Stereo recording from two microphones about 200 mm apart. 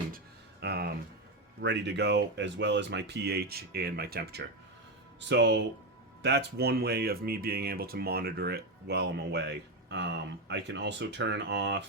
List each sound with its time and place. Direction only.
0.6 s speech: 55° right (ahead or behind)